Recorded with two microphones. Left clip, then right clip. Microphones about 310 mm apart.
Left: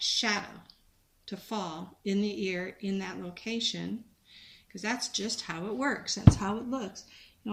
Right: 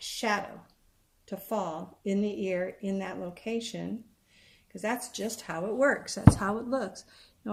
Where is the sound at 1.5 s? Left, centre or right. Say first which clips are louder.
Right 4 dB; right.